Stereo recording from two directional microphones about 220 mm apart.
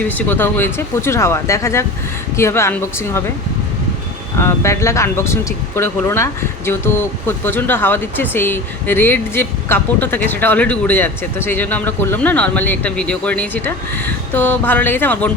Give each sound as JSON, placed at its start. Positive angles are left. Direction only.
{"t": 0.0, "sound": "speech", "side_deg": 5}
{"t": 4.4, "sound": "speech", "side_deg": 10}